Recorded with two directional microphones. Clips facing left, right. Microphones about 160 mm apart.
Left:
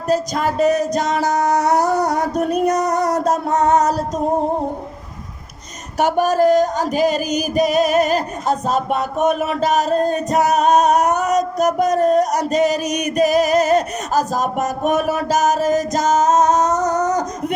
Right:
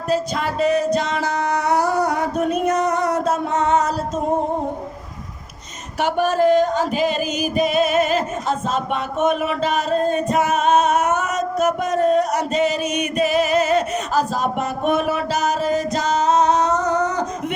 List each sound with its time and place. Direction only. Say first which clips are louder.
0.1 s music: left 3 dB; 40° left (ahead or behind)
6.0 s music: left 3 dB; 40° left (ahead or behind)